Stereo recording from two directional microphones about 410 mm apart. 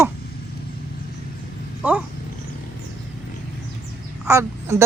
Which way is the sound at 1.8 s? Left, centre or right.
Centre.